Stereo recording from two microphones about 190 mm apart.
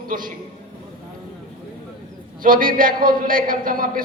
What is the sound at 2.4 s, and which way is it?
A man's voice, 45° right (ahead or behind).